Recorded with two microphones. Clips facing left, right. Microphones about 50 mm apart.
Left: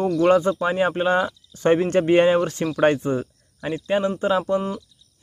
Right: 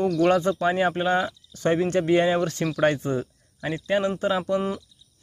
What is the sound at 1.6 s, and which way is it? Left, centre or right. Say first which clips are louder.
Speech: left 4 dB; left.